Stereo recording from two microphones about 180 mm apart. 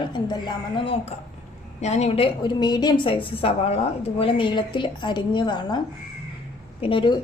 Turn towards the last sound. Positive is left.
turn(degrees=30)  # may be behind; listen again after turning